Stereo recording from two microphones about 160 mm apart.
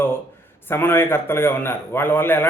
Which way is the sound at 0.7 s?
15° left (ahead or behind).